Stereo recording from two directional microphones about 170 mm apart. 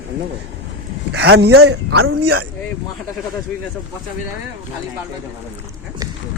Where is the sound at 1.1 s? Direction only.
75° right (ahead or behind).